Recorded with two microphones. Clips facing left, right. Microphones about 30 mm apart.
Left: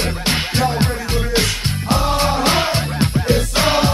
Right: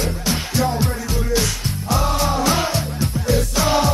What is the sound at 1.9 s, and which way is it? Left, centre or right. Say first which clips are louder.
Music: left 2 dB; left.